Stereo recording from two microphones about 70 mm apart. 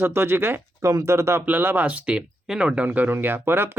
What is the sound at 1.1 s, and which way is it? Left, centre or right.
Speech, right.